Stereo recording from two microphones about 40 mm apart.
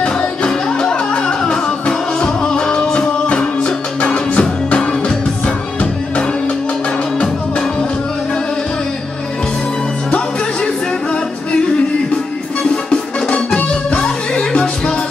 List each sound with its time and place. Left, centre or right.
0.0 s music: left
0.5 s flamenco: centre
4.0 s music: left
12.9 s music: left